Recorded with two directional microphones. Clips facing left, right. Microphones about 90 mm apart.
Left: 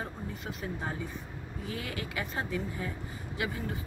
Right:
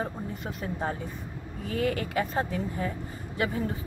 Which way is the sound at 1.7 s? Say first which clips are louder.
Right 10 dB; 50° right (ahead or behind).